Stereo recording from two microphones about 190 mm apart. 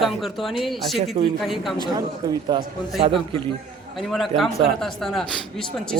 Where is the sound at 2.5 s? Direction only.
25° right (ahead or behind).